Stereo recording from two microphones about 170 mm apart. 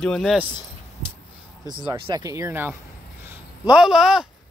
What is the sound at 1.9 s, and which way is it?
Speech, 20° right (ahead or behind).